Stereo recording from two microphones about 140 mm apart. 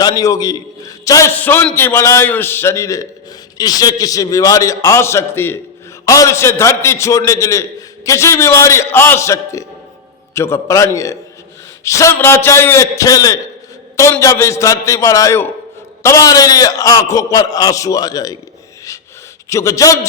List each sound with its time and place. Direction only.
0.0 s a man's voice: 25° left (ahead or behind)
19.5 s a man's voice: 20° left (ahead or behind)